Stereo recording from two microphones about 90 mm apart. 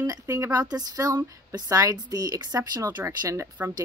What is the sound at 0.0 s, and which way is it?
A woman's voice, 35° right (ahead or behind).